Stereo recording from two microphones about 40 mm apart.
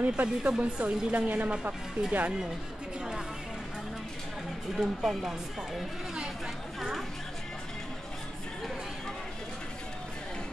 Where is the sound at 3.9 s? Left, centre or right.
Centre.